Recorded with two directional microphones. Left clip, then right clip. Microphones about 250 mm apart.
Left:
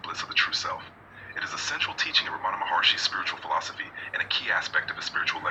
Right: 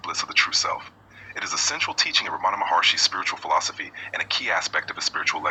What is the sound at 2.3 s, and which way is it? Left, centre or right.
Speech, right.